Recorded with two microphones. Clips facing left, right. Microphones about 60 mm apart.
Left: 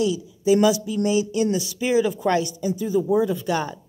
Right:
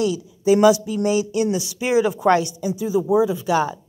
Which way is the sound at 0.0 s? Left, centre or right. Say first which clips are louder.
Right 1 dB; right.